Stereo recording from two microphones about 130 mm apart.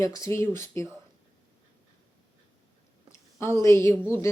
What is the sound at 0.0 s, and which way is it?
Speech, 25° left (ahead or behind).